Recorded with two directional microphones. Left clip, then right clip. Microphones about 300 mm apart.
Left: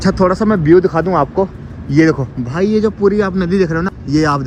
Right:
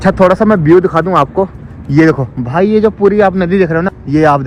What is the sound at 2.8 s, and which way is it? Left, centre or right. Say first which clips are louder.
Speech: right 2 dB; right.